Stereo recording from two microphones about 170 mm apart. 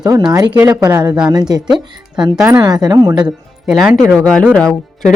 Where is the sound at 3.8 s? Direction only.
5° right (ahead or behind).